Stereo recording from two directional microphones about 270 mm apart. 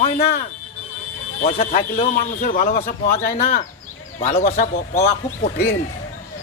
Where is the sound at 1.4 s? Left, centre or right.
Left.